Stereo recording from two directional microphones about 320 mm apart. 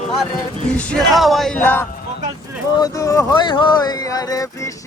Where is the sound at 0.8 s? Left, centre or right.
Centre.